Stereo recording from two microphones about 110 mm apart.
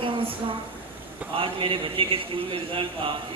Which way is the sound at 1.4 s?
55° right (ahead or behind).